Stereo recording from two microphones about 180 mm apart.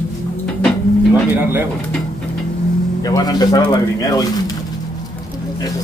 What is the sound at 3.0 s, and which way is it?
A man's voice, 20° left (ahead or behind).